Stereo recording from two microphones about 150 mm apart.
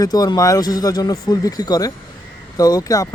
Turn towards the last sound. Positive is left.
turn(degrees=25)  # may be behind; listen again after turning